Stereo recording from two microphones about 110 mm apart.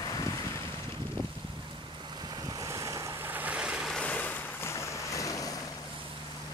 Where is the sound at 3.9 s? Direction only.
15° left (ahead or behind); by 5.5 s 30° left (ahead or behind).